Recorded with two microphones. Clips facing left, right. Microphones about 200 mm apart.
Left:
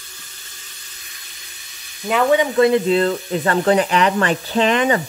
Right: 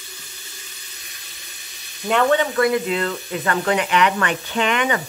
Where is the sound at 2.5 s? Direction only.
25° left (ahead or behind).